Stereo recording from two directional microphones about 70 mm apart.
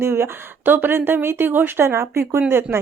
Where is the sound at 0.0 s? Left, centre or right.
Right.